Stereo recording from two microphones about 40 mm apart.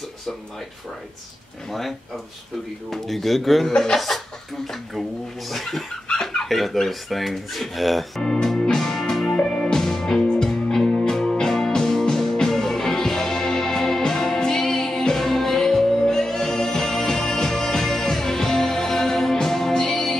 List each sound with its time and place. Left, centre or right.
1.7 s speech: centre
3.7 s speech: centre
5.5 s speech: centre
8.2 s music: centre
9.4 s music: left
9.8 s music: centre